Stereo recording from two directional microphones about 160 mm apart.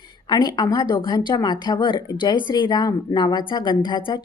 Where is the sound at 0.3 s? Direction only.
25° left (ahead or behind).